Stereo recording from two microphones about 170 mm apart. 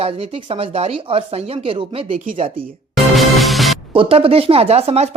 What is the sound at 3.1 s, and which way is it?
Music, centre (ahead or behind).